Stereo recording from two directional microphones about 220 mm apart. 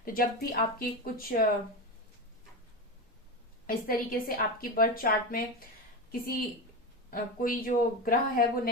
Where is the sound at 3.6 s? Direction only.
40° left (ahead or behind).